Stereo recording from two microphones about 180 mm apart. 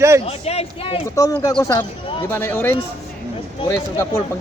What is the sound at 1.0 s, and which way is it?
Speech, 20° left (ahead or behind).